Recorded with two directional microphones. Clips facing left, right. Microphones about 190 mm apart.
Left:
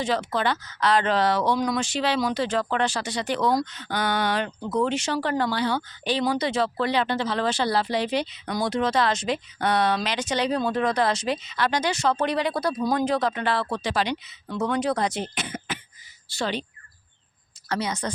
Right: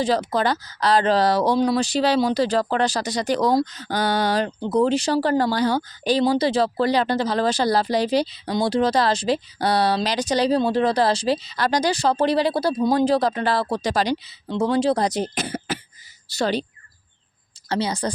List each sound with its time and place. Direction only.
0.0 s speech: 35° right (ahead or behind)
14.4 s speech: 25° right (ahead or behind)
17.7 s speech: 30° right (ahead or behind)